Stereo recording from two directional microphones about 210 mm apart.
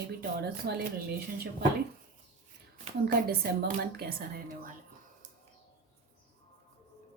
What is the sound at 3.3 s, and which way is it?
Speech, 50° right (ahead or behind).